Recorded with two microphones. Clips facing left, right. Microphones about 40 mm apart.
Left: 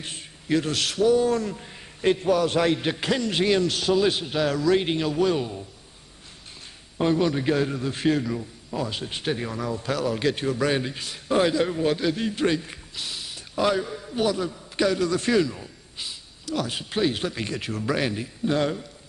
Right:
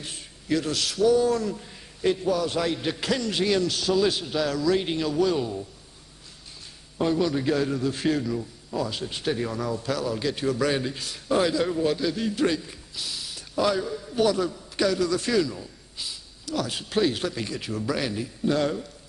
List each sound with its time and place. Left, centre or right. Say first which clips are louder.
0.0 s speech: left 2 dB; left
2.2 s a man's voice: left 4 dB; left
7.0 s a man's voice: left 1 dB; left; by 9.8 s centre
9.8 s a man's voice: left 5 dB; left
10.4 s a man's voice: even; left
12.6 s a sound: left 1 dB; left
14.0 s a man's voice: right 3 dB; centre
17.5 s a man's voice: left 2 dB; left; by 18.8 s centre